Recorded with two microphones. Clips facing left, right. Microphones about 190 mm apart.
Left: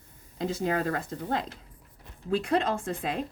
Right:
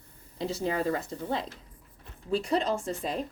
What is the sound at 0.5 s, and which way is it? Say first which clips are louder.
Speech: even; 50° left (ahead or behind).